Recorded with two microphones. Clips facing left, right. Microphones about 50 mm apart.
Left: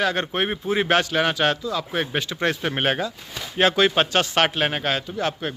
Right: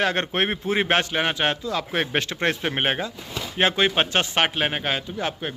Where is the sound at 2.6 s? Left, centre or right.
Centre.